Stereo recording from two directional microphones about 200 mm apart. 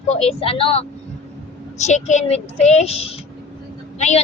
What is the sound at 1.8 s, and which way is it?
A child's voice, 35° left (ahead or behind).